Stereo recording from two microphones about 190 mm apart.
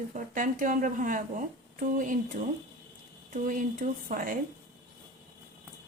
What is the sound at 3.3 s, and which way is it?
Speech, 45° right (ahead or behind).